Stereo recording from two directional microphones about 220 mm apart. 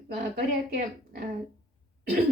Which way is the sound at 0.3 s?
40° right (ahead or behind).